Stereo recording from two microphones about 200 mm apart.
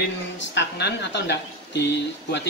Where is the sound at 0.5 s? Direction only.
60° left (ahead or behind).